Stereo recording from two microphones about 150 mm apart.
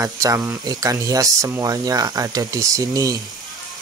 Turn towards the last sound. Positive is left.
turn(degrees=-25)  # may be behind; listen again after turning